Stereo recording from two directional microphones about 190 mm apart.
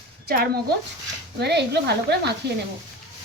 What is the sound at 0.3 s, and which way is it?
Speech, 55° right (ahead or behind).